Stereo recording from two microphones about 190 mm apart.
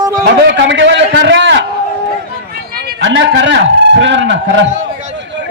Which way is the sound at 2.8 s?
70° right (ahead or behind).